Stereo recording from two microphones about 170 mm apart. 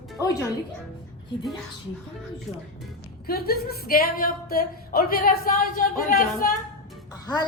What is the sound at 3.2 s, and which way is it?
Speech, 65° left (ahead or behind).